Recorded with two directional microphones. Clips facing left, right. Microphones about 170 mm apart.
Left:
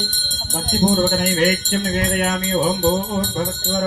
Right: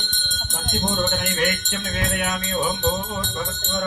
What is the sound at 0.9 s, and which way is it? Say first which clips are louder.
Music: left 7 dB; 40° left (ahead or behind).